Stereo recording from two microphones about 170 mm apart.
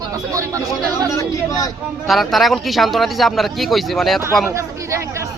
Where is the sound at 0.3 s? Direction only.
20° right (ahead or behind).